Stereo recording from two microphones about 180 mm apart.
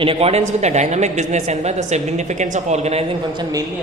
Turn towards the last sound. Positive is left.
turn(degrees=-35)  # may be behind; listen again after turning